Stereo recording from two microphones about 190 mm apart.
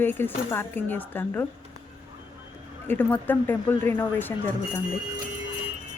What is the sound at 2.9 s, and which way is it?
A woman's voice, 10° left (ahead or behind).